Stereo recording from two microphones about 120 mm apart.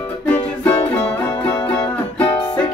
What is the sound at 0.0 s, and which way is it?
Music, 15° left (ahead or behind).